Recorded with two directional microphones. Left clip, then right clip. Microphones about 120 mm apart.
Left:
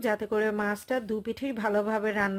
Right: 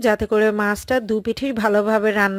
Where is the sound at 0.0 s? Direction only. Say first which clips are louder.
Right 10 dB; 45° right (ahead or behind).